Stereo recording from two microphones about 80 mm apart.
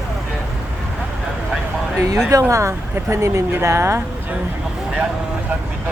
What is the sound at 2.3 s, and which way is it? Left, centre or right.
Speech, right.